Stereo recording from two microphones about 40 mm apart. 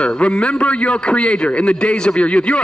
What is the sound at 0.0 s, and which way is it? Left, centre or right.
A man's voice, left.